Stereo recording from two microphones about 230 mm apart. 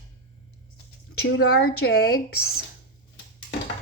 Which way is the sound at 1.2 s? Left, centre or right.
Left.